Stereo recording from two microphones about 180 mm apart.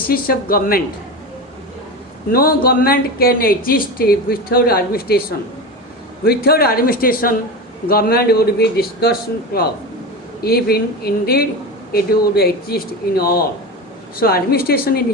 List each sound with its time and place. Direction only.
0.1 s speech: 55° left (ahead or behind)
2.3 s speech: 55° left (ahead or behind)
6.2 s speech: 60° left (ahead or behind)
10.4 s speech: 60° left (ahead or behind)